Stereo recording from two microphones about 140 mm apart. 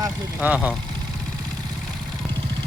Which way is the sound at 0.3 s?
10° right (ahead or behind).